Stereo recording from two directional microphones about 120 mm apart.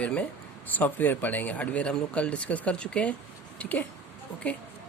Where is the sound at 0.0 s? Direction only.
10° left (ahead or behind).